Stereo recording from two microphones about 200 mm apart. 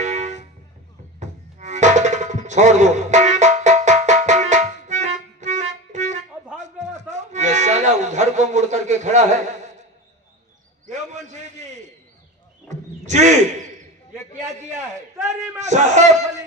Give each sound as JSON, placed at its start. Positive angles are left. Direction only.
{"t": 0.0, "sound": "vehicle", "side_deg": -35}
{"t": 1.2, "sound": "music", "side_deg": -35}
{"t": 10.8, "sound": "a sound", "side_deg": -35}
{"t": 15.6, "sound": "speech", "side_deg": -35}